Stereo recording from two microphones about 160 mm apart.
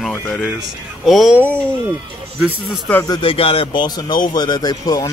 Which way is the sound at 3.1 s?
30° left (ahead or behind).